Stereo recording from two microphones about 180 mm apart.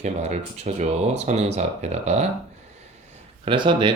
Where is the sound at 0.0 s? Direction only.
40° right (ahead or behind).